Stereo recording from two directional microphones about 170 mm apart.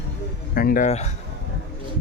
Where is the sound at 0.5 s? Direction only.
55° left (ahead or behind).